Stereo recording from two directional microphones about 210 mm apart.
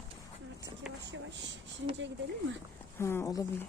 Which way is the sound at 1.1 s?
55° right (ahead or behind).